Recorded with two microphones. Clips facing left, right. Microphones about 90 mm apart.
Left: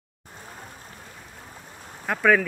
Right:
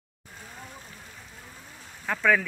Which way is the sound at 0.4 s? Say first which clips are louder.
Left 1 dB; 40° left (ahead or behind).